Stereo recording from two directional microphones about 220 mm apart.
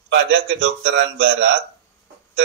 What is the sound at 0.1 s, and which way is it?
Speech, 55° right (ahead or behind).